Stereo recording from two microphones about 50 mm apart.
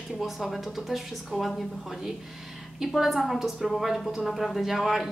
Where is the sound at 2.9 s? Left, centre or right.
Centre.